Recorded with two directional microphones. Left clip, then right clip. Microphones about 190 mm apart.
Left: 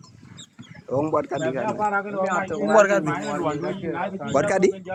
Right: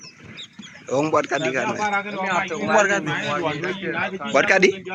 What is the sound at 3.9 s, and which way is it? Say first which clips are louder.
Speech: right 3 dB; 55° left (ahead or behind).